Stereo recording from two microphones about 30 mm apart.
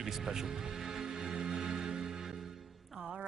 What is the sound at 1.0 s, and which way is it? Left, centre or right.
Music, right.